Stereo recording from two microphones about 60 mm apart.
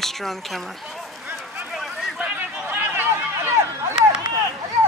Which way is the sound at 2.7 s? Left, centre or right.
Right.